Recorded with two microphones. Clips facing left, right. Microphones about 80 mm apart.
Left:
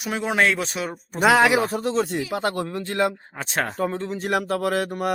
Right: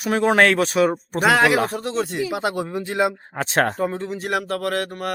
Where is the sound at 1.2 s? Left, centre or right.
Centre.